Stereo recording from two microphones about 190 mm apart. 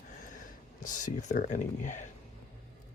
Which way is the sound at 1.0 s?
40° left (ahead or behind).